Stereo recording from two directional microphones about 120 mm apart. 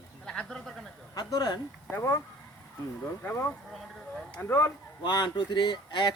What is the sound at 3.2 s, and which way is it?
Speech, 15° left (ahead or behind).